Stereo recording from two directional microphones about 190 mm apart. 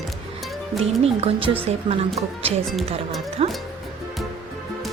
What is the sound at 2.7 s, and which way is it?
Speech, centre (ahead or behind).